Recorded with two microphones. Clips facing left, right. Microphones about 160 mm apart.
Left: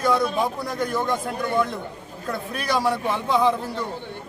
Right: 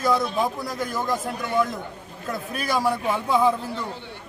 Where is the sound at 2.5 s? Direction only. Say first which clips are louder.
Even; 5° right (ahead or behind).